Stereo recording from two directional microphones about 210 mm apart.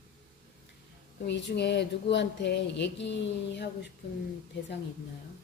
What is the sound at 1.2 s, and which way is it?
Speech, 55° left (ahead or behind).